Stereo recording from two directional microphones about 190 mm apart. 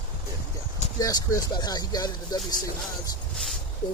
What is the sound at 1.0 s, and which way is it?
Speech, 20° left (ahead or behind).